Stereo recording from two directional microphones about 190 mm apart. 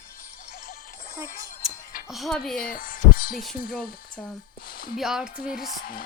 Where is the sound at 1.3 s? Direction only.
45° left (ahead or behind).